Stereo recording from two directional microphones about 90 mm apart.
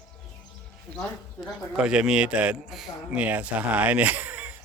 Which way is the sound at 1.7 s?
10° right (ahead or behind).